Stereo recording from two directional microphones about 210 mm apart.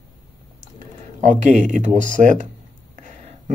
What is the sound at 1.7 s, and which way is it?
Speech, 35° right (ahead or behind).